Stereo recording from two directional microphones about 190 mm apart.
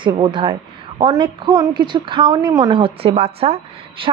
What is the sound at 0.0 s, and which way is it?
A woman's voice, 25° right (ahead or behind).